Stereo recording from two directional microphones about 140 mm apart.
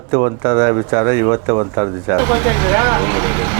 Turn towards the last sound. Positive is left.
turn(degrees=-20)  # may be behind; listen again after turning